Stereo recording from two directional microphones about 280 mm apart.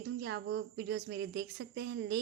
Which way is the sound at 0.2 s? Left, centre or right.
Right.